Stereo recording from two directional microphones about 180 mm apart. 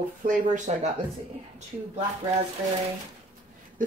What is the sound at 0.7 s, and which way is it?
Speech, 40° right (ahead or behind).